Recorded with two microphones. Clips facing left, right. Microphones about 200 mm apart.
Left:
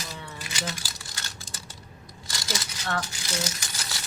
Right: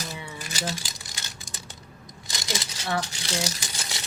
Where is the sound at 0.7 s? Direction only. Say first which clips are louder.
Right 3 dB; 20° right (ahead or behind).